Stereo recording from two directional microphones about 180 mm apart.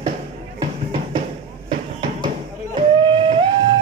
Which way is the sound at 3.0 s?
25° right (ahead or behind).